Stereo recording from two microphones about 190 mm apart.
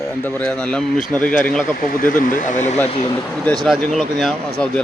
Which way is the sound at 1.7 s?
50° left (ahead or behind).